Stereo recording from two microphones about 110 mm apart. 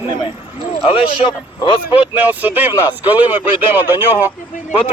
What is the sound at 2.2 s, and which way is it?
A man's voice, 15° right (ahead or behind).